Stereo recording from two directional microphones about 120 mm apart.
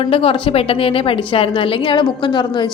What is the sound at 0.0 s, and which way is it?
A woman's voice, 50° left (ahead or behind).